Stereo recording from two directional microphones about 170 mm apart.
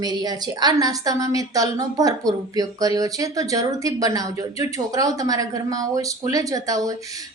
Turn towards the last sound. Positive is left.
turn(degrees=-20)  # may be behind; listen again after turning